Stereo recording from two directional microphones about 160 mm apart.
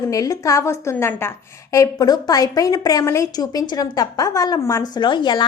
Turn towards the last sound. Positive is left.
turn(degrees=30)  # may be behind; listen again after turning